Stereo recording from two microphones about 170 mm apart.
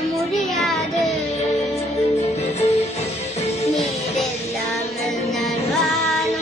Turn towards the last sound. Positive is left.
turn(degrees=0)  # may be behind; listen again after turning